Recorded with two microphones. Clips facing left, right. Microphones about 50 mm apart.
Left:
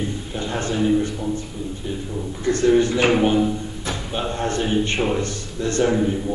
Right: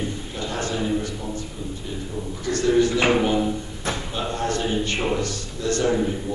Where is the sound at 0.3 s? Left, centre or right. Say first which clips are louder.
Left 4 dB; left.